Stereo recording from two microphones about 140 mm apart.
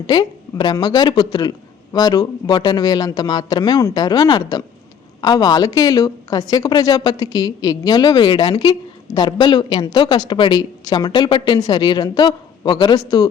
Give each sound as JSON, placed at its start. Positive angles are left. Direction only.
{"t": 0.1, "sound": "a woman's voice", "side_deg": 30}